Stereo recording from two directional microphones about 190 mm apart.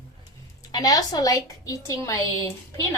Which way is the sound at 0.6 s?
20° left (ahead or behind).